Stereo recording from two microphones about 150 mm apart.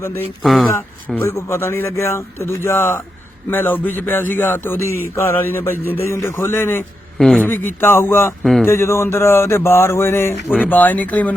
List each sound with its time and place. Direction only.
0.4 s speech: centre (ahead or behind)
1.1 s speech: 15° left (ahead or behind)
7.2 s speech: centre (ahead or behind)
7.4 s speech: 15° left (ahead or behind)